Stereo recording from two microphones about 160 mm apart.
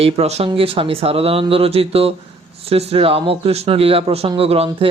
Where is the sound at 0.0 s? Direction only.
40° right (ahead or behind).